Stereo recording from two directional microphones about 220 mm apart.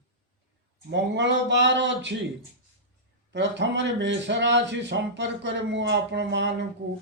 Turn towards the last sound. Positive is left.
turn(degrees=-50)  # may be behind; listen again after turning